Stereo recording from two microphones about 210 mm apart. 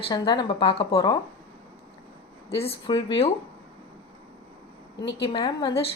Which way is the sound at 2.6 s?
25° left (ahead or behind).